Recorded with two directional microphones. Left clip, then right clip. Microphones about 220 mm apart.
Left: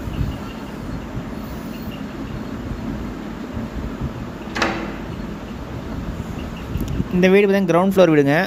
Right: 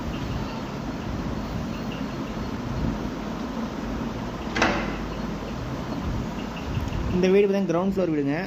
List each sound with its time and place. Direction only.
7.2 s speech: 40° left (ahead or behind)